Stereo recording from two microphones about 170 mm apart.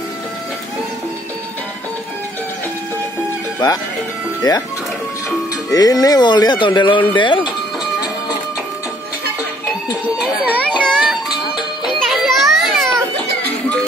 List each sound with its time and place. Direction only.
3.5 s speech: 20° left (ahead or behind)
5.7 s speech: 20° left (ahead or behind)
10.0 s baby cry: 10° right (ahead or behind)
10.8 s music: centre (ahead or behind)